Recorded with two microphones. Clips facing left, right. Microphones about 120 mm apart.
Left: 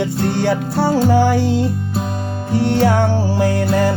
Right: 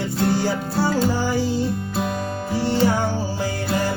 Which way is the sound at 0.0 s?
70° left (ahead or behind).